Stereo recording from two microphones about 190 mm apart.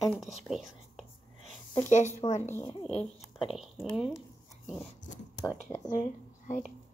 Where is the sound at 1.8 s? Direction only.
40° left (ahead or behind).